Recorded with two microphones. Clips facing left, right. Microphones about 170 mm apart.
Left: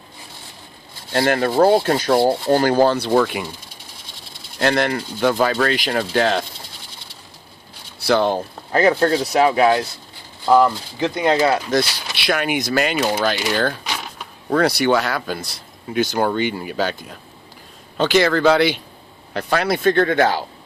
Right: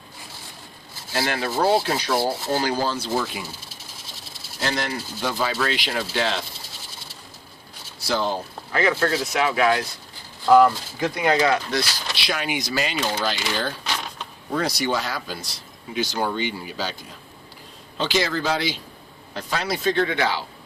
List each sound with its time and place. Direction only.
1.1 s rub: 50° left (ahead or behind)
4.6 s rub: 60° left (ahead or behind)
7.9 s speech: 65° left (ahead or behind)
8.7 s speech: 35° left (ahead or behind)
11.0 s speech: 25° left (ahead or behind)
11.7 s speech: 55° left (ahead or behind)
13.8 s power windows: 10° left (ahead or behind)
14.5 s speech: 65° left (ahead or behind)
17.9 s speech: 55° left (ahead or behind)